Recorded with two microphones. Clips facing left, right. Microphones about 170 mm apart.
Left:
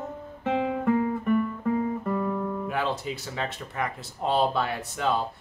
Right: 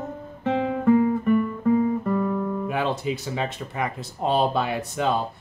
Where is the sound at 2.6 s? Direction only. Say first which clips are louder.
Right 4 dB; 15° right (ahead or behind).